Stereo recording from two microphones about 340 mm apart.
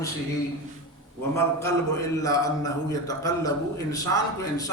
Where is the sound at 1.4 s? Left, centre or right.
Centre.